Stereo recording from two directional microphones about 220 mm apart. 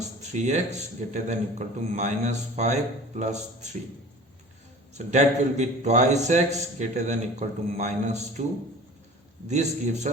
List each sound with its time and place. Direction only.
0.2 s a man's voice: 30° right (ahead or behind)
4.9 s a man's voice: 30° right (ahead or behind)
9.5 s a man's voice: 30° right (ahead or behind)